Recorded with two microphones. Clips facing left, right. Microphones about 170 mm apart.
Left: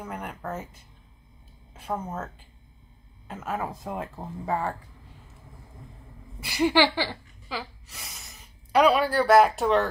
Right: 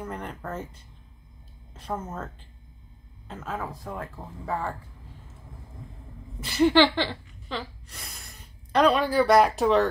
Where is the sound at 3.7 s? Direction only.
20° left (ahead or behind).